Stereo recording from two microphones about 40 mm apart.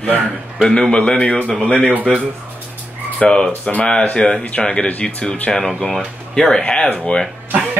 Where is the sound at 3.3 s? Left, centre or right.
Centre; by 5.0 s left.